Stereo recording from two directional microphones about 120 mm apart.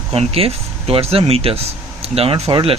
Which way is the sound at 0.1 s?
55° right (ahead or behind).